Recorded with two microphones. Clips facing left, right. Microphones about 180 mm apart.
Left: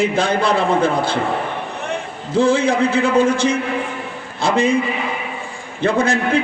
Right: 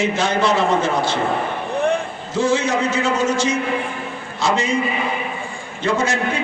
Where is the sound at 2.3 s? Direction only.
55° left (ahead or behind).